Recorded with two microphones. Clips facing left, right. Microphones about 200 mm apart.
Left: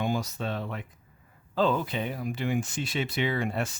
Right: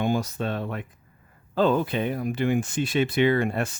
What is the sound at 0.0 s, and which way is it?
Speech, 55° right (ahead or behind).